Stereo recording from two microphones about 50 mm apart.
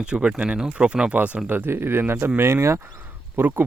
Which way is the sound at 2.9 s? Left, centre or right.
Right.